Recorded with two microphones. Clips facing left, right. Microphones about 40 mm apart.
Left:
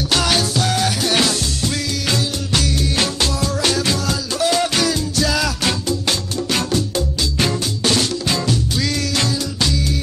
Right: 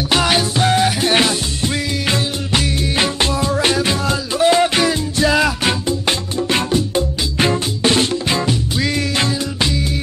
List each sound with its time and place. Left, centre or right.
0.1 s music: right